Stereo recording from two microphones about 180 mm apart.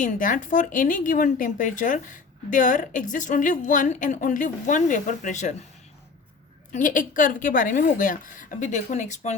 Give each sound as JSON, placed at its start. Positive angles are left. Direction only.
{"t": 0.0, "sound": "speech", "side_deg": 45}
{"t": 6.7, "sound": "speech", "side_deg": 45}